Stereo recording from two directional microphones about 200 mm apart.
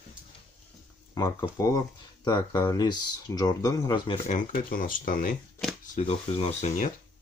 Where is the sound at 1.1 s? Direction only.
20° left (ahead or behind).